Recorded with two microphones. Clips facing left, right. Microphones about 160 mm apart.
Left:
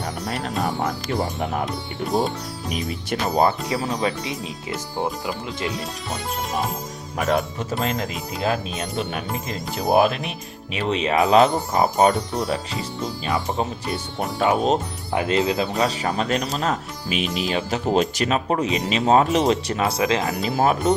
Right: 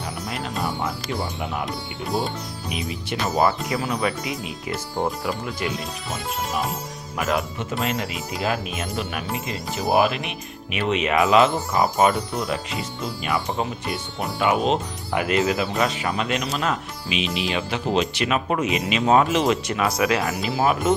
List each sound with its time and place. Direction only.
1.2 s speech: 45° left (ahead or behind)
2.6 s speech: 45° left (ahead or behind)
3.7 s speech: 30° left (ahead or behind)
7.2 s speech: 35° left (ahead or behind)
20.5 s speech: 50° left (ahead or behind)